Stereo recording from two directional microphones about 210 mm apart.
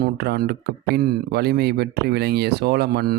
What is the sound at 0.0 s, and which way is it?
Speech, 50° right (ahead or behind).